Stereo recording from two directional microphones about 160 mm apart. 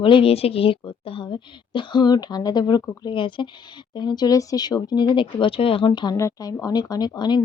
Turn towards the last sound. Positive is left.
turn(degrees=25)  # may be behind; listen again after turning